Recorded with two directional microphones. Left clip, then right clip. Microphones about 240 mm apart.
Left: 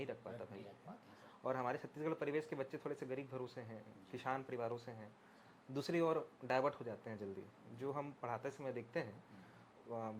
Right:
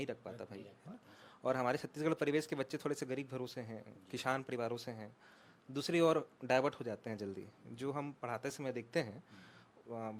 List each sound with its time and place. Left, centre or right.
0.0 s a sound: right
1.5 s speech: right
5.7 s speech: right
9.9 s speech: right